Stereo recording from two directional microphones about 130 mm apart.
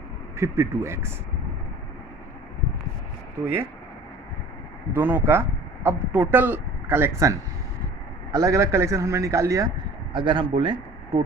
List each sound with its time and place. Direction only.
0.3 s a man's voice: 20° right (ahead or behind)
3.4 s speech: 15° right (ahead or behind)
4.9 s a man's voice: 15° right (ahead or behind)
10.1 s speech: 40° right (ahead or behind)